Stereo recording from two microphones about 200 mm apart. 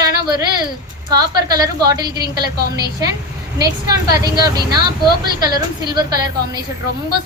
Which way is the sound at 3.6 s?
20° right (ahead or behind).